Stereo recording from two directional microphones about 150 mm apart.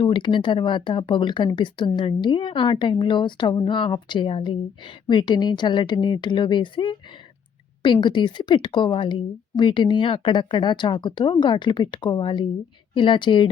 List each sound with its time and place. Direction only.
0.0 s speech: 35° left (ahead or behind)
8.0 s speech: 30° left (ahead or behind)